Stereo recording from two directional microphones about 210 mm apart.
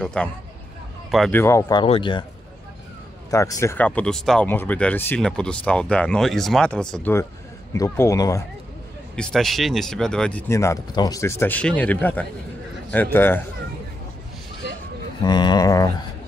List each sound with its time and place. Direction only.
0.0 s speech: 5° left (ahead or behind)
1.4 s speech: 15° left (ahead or behind)
3.3 s speech: 15° left (ahead or behind)
9.1 s speech: 5° left (ahead or behind)
15.2 s speech: 20° left (ahead or behind)